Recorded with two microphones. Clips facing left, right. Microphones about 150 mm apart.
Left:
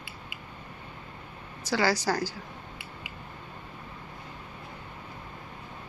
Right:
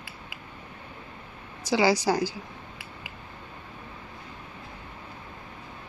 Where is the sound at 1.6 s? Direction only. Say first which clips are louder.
Right 4 dB; 15° right (ahead or behind).